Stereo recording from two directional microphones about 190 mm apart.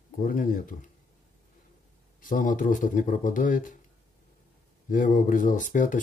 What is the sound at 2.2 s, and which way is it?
Speech, 45° left (ahead or behind).